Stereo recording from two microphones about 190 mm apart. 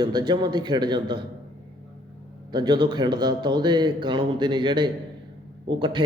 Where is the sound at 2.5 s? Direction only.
20° right (ahead or behind).